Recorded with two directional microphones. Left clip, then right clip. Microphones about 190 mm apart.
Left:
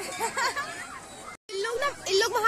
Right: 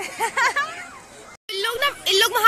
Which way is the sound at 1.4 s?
5° left (ahead or behind).